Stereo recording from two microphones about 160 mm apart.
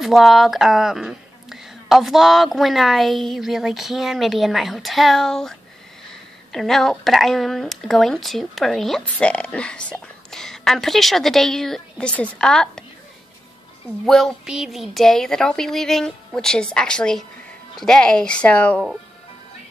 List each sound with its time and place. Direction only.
0.0 s speech: centre (ahead or behind)
14.0 s speech: centre (ahead or behind)